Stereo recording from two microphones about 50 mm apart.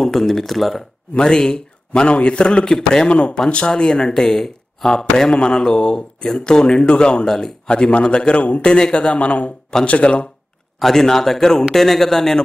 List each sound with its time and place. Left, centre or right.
0.0 s speech: centre
1.1 s a man's voice: centre
7.6 s a man's voice: left
10.8 s a man's voice: centre